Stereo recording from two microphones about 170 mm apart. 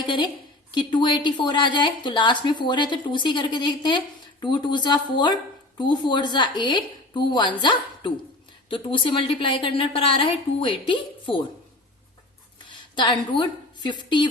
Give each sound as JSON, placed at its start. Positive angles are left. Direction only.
{"t": 0.0, "sound": "a woman's voice", "side_deg": 25}
{"t": 8.7, "sound": "a woman's voice", "side_deg": 30}
{"t": 13.0, "sound": "a woman's voice", "side_deg": 25}